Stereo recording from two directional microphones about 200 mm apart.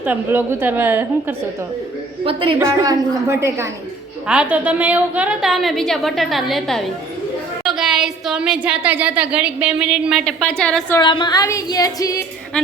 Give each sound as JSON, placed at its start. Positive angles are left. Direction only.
{"t": 0.0, "sound": "a woman's voice", "side_deg": -10}
{"t": 2.2, "sound": "a woman's voice", "side_deg": -25}
{"t": 2.6, "sound": "a woman's voice", "side_deg": -15}
{"t": 10.9, "sound": "speech", "side_deg": 25}
{"t": 12.5, "sound": "speech", "side_deg": 0}